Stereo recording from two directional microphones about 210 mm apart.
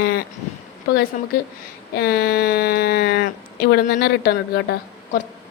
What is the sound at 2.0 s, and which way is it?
A woman's voice, 50° left (ahead or behind).